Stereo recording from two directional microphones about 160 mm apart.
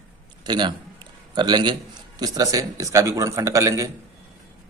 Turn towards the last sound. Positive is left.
turn(degrees=-20)  # may be behind; listen again after turning